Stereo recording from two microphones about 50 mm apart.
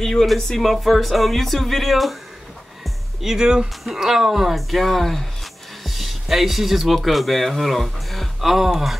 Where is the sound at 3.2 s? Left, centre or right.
Centre.